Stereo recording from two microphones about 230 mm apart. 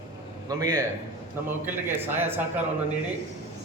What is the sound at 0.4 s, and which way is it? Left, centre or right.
Speech, centre.